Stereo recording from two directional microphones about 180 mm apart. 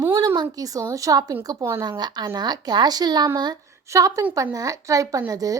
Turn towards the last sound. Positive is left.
turn(degrees=-20)  # may be behind; listen again after turning